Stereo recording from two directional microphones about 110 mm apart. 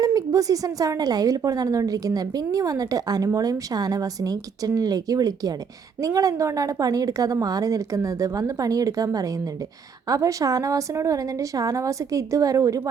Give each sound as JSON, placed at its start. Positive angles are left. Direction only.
{"t": 0.0, "sound": "a woman's voice", "side_deg": -35}